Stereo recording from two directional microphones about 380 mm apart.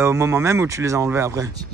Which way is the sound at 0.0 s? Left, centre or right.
Centre.